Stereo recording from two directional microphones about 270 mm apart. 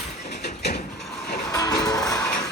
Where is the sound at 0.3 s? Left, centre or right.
Left.